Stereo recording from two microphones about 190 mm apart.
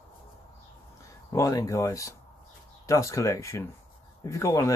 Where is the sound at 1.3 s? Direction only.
15° left (ahead or behind).